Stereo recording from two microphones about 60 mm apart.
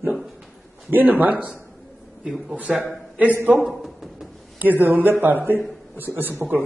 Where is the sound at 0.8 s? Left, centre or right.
Right.